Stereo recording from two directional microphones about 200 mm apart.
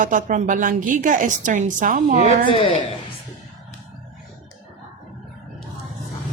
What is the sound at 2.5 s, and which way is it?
Speech, 25° left (ahead or behind).